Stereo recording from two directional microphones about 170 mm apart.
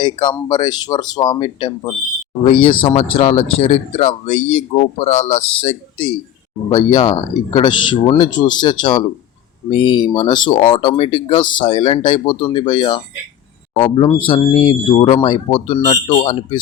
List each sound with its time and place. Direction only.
0.0 s speech: 25° left (ahead or behind)